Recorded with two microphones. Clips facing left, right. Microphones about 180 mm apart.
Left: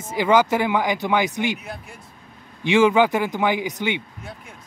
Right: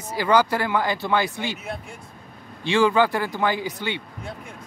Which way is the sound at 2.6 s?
20° left (ahead or behind).